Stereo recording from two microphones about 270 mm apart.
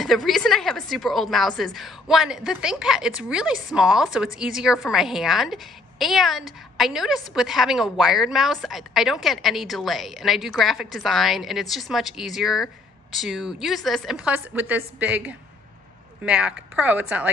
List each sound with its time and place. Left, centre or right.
0.0 s a woman's voice: centre